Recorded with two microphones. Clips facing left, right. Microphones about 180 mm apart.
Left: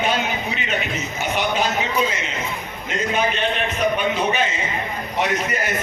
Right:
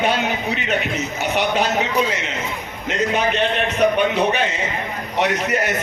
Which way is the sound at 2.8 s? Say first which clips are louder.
Right 2 dB; 70° right (ahead or behind).